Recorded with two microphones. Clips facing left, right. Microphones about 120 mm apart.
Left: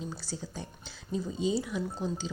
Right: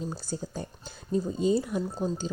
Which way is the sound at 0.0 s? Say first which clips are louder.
Right 4 dB; 45° right (ahead or behind).